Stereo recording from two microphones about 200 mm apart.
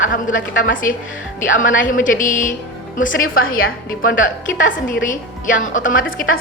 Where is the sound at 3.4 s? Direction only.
85° left.